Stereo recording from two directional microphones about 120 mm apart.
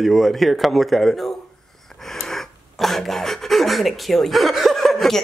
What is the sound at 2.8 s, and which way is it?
Speech, centre (ahead or behind).